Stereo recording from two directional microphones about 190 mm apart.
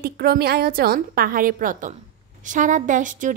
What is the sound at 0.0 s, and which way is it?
A woman's voice, 55° right (ahead or behind).